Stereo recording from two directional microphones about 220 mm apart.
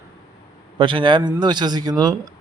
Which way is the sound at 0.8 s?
20° right (ahead or behind).